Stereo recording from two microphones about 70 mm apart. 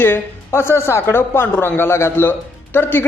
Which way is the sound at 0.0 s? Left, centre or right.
Left.